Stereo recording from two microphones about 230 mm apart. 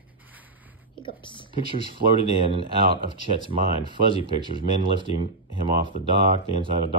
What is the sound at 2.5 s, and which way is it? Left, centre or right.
Speech, right.